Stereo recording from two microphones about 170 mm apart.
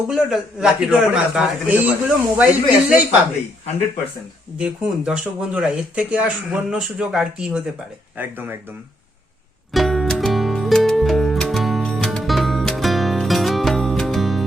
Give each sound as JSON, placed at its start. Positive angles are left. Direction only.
{"t": 0.1, "sound": "speech", "side_deg": -5}
{"t": 4.5, "sound": "speech", "side_deg": -5}
{"t": 9.7, "sound": "music", "side_deg": 0}